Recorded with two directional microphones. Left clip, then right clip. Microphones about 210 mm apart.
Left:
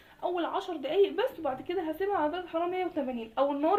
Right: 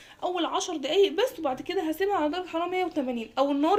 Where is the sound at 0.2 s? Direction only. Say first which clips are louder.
Right 3 dB; 45° right (ahead or behind).